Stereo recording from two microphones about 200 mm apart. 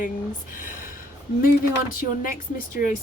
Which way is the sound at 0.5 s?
45° left (ahead or behind).